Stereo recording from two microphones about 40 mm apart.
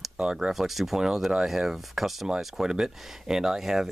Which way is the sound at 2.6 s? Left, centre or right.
Centre.